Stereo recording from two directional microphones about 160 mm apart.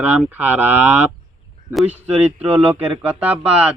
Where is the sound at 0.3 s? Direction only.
10° right (ahead or behind).